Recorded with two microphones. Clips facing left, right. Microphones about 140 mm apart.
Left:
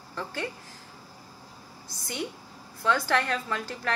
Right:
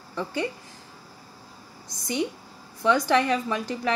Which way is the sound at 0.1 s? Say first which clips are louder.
Right 5 dB; 15° right (ahead or behind).